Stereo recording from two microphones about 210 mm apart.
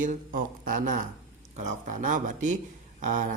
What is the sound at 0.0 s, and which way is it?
Speech, 40° right (ahead or behind).